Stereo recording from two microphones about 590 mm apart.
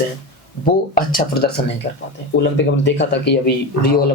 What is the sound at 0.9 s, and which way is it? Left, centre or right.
Speech, centre.